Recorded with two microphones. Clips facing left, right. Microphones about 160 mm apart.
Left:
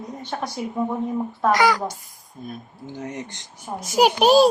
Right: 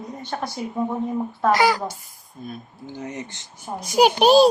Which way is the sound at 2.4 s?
Centre (ahead or behind).